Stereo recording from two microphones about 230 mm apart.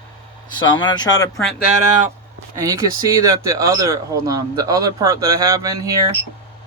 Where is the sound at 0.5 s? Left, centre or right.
Centre.